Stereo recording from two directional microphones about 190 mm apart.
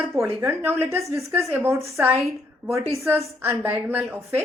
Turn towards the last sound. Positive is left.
turn(degrees=-10)  # may be behind; listen again after turning